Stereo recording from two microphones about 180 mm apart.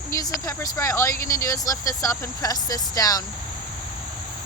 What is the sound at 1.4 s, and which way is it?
Speech, 15° left (ahead or behind).